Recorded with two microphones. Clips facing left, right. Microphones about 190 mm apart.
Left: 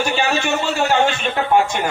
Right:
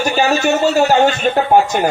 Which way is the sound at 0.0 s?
40° right (ahead or behind).